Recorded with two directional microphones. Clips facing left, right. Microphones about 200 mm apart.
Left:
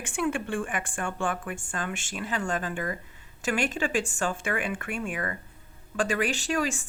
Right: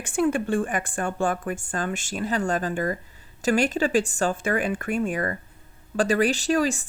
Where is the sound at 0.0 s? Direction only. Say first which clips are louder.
Right 6 dB; 40° right (ahead or behind).